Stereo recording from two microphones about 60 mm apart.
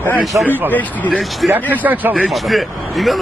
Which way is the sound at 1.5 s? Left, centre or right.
Right.